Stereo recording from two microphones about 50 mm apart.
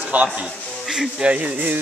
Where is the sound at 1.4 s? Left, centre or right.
Right.